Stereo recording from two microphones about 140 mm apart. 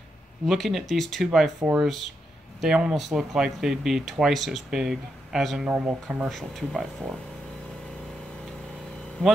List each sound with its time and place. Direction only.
0.5 s speech: centre (ahead or behind)
9.2 s speech: 5° left (ahead or behind)